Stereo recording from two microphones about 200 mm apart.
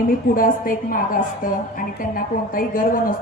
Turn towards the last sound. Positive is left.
turn(degrees=45)  # may be behind; listen again after turning